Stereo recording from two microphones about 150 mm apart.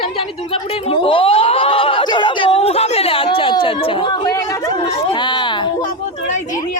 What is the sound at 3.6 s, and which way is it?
Chatter, 35° left (ahead or behind).